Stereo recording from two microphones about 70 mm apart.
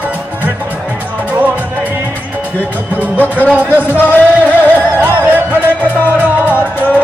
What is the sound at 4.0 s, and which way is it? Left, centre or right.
Music, left.